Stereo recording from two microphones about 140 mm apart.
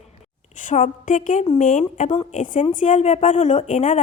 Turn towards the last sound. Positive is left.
turn(degrees=65)  # may be behind; listen again after turning